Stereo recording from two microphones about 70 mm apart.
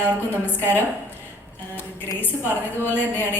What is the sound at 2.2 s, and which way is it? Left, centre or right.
A woman's voice, left.